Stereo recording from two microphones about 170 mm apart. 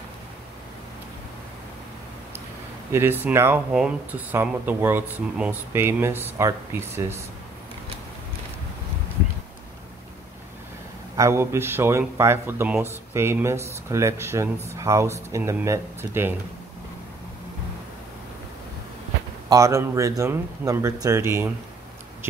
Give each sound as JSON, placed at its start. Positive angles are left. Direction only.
{"t": 2.9, "sound": "speech", "side_deg": -15}
{"t": 11.1, "sound": "speech", "side_deg": -15}
{"t": 19.5, "sound": "speech", "side_deg": -15}